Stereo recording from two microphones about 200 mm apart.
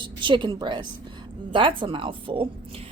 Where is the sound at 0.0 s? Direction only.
25° right (ahead or behind).